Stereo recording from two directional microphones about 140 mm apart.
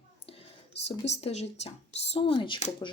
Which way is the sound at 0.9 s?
50° left (ahead or behind).